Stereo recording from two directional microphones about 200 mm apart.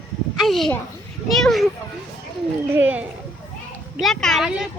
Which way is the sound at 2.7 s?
10° right (ahead or behind).